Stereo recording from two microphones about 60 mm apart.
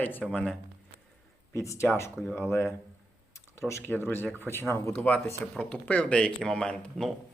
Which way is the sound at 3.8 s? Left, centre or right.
Left.